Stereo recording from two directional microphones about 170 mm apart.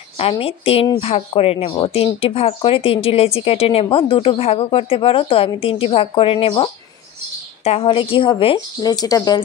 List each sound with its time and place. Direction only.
0.2 s speech: 35° left (ahead or behind)